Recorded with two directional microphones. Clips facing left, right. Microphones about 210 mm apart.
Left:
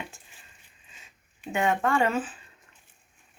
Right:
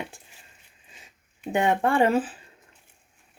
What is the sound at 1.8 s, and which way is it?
Speech, 30° right (ahead or behind).